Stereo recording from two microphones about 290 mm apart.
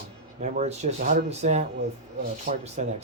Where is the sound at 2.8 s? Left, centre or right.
Right.